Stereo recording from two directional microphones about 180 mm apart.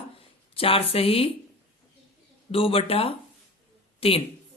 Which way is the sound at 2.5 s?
30° left (ahead or behind).